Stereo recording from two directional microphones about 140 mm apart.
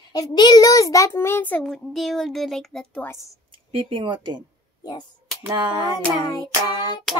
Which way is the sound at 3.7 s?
40° right (ahead or behind).